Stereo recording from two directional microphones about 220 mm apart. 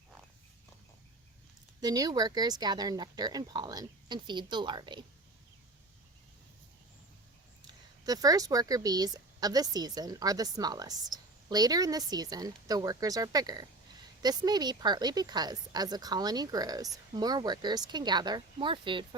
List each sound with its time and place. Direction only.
1.8 s speech: 15° right (ahead or behind)
8.0 s speech: 15° right (ahead or behind)